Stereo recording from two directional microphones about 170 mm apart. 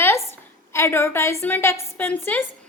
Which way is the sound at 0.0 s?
15° left (ahead or behind).